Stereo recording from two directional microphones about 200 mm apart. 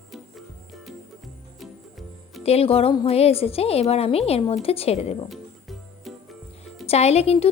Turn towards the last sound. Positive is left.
turn(degrees=30)  # may be behind; listen again after turning